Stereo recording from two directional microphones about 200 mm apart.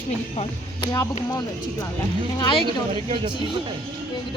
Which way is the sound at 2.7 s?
25° right (ahead or behind).